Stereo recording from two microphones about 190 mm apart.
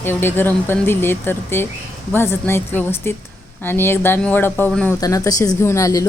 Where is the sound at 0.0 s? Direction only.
10° left (ahead or behind).